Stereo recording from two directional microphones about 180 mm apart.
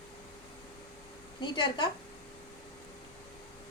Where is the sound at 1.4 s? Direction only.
25° left (ahead or behind).